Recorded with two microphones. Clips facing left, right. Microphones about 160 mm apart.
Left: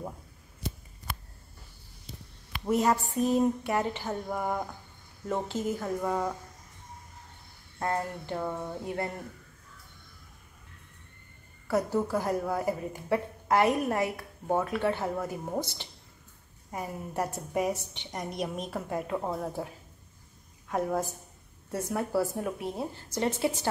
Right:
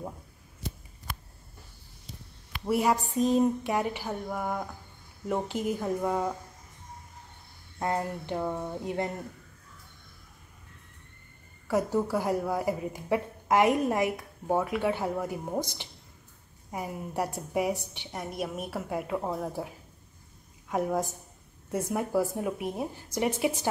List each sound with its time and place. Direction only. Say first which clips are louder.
2.7 s a woman's voice: even; 10° right (ahead or behind)
4.3 s speech: left 1 dB; centre (ahead or behind)
5.2 s a woman's voice: right 1 dB; 15° right (ahead or behind)
7.8 s a woman's voice: right 1 dB; 15° right (ahead or behind)
11.6 s a woman's voice: right 1 dB; 15° right (ahead or behind)
20.7 s a woman's voice: right 1 dB; 15° right (ahead or behind)